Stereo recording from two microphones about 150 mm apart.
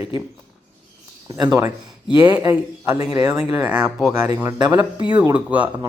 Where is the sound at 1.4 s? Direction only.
25° right (ahead or behind).